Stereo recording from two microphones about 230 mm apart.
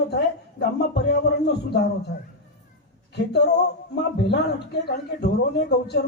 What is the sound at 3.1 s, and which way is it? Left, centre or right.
Speech, left.